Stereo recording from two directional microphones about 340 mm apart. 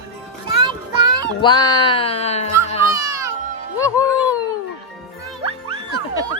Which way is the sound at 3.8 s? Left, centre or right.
Centre.